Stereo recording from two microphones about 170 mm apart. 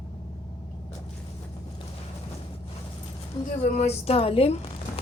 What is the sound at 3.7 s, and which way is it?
Speech, 40° left (ahead or behind).